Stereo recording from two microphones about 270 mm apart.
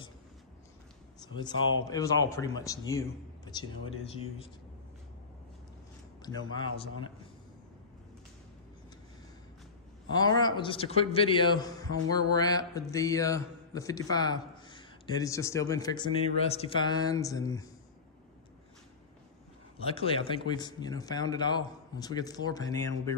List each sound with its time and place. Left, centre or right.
1.2 s a man's voice: centre
6.2 s a man's voice: centre
10.1 s a man's voice: centre
19.8 s a man's voice: left